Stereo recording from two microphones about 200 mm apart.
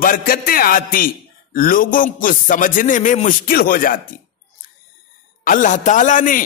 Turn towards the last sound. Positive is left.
turn(degrees=40)  # may be behind; listen again after turning